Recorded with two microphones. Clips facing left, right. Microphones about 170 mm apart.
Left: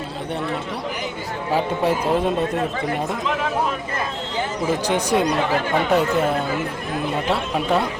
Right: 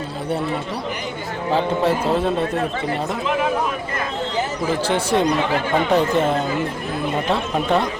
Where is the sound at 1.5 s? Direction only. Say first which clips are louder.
Right 1 dB; 15° left (ahead or behind).